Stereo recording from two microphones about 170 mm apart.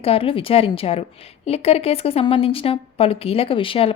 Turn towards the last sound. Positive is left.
turn(degrees=30)  # may be behind; listen again after turning